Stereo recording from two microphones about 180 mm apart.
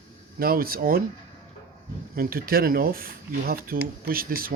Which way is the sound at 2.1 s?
55° right (ahead or behind).